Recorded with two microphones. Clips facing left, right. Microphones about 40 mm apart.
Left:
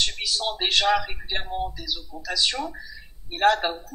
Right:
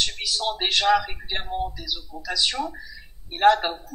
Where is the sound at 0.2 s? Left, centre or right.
Centre.